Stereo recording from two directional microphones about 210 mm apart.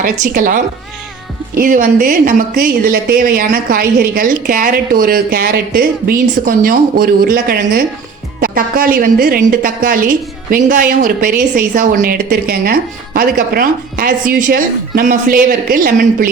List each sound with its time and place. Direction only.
0.0 s a woman's voice: 40° right (ahead or behind)